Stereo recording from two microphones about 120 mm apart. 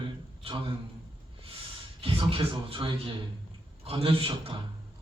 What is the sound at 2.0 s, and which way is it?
A man's voice, 50° right (ahead or behind).